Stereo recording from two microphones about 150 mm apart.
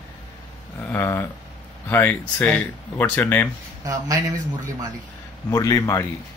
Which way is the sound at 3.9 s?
25° right (ahead or behind).